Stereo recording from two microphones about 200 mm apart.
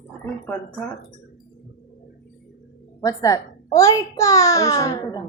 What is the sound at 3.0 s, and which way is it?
A child's voice, 15° left (ahead or behind).